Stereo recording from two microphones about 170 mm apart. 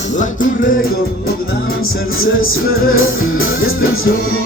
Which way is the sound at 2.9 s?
55° left (ahead or behind).